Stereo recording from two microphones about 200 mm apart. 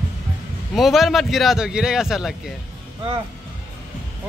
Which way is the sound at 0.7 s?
Centre (ahead or behind).